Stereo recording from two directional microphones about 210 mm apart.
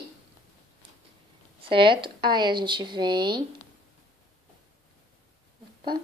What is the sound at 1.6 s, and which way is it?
Speech, 25° right (ahead or behind).